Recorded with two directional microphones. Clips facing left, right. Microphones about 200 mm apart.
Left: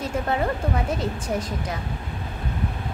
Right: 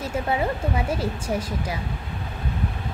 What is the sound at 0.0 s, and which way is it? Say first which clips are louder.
A woman's voice: even; 10° right (ahead or behind).